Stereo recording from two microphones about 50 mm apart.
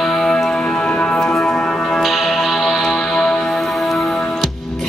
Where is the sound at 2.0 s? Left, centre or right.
Centre.